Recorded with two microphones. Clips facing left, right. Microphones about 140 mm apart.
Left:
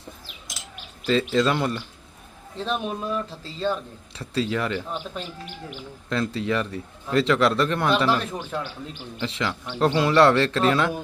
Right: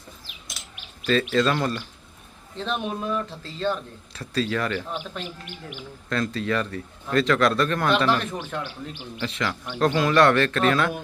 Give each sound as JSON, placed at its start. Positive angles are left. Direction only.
{"t": 1.3, "sound": "a man's voice", "side_deg": 20}
{"t": 2.6, "sound": "speech", "side_deg": 5}
{"t": 4.2, "sound": "a man's voice", "side_deg": 20}
{"t": 6.1, "sound": "a man's voice", "side_deg": 20}
{"t": 7.9, "sound": "speech", "side_deg": 10}
{"t": 9.2, "sound": "a man's voice", "side_deg": 20}
{"t": 10.0, "sound": "a man's voice", "side_deg": 25}